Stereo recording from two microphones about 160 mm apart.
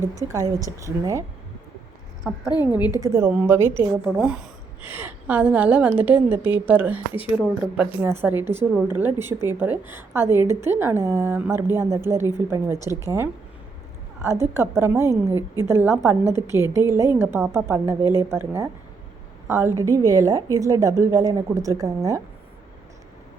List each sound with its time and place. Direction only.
0.3 s a woman's voice: 20° right (ahead or behind)
3.0 s speech: 15° right (ahead or behind)
4.0 s a woman's voice: 5° right (ahead or behind)
14.4 s a woman's voice: 15° right (ahead or behind)